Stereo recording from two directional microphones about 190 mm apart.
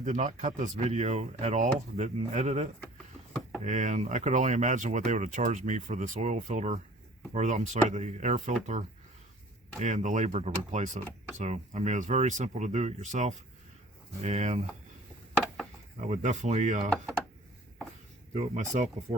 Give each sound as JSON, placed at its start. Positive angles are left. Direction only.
{"t": 0.0, "sound": "speech", "side_deg": -40}
{"t": 9.8, "sound": "speech", "side_deg": -40}
{"t": 16.0, "sound": "speech", "side_deg": -40}
{"t": 18.3, "sound": "speech", "side_deg": -40}